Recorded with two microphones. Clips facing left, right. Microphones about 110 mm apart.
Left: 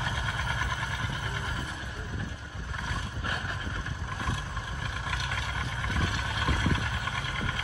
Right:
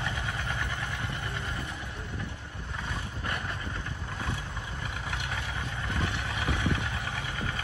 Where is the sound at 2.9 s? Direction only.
15° left (ahead or behind).